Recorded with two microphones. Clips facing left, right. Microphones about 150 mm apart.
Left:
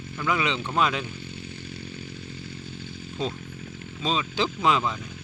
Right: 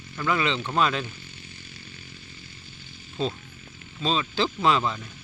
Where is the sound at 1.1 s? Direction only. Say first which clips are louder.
Left 8 dB; 60° left (ahead or behind).